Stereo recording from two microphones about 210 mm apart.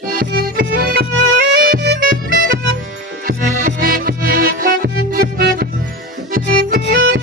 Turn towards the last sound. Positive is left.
turn(degrees=-45)  # may be behind; listen again after turning